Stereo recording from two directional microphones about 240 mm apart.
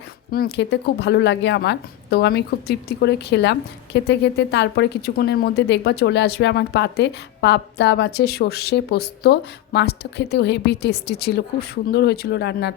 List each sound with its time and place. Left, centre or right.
0.3 s speech: left